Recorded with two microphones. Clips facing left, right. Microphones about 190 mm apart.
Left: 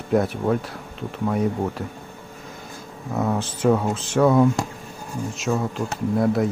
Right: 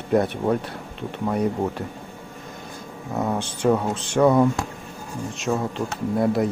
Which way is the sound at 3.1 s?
Centre (ahead or behind).